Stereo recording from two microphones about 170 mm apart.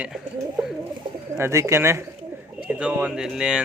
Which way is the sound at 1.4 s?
15° right (ahead or behind).